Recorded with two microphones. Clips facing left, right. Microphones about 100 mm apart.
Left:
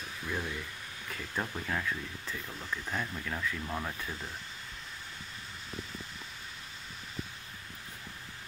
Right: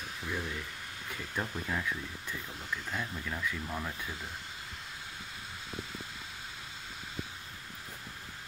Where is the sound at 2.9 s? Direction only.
Centre (ahead or behind).